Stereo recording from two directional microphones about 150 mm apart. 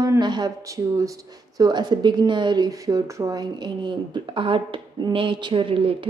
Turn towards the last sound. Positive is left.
turn(degrees=-35)  # may be behind; listen again after turning